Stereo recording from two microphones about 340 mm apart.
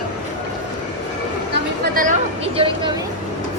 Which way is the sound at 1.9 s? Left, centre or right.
Centre.